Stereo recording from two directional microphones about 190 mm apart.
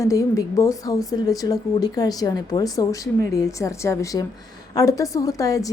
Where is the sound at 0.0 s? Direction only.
15° left (ahead or behind).